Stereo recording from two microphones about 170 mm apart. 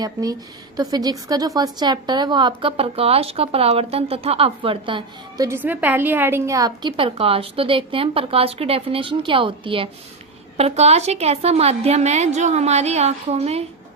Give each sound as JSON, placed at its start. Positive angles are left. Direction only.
{"t": 0.0, "sound": "a woman's voice", "side_deg": -20}
{"t": 5.6, "sound": "a woman's voice", "side_deg": -10}